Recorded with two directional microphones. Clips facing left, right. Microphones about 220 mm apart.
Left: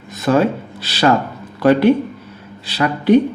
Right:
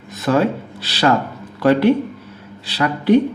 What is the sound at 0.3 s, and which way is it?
Speech, 20° left (ahead or behind).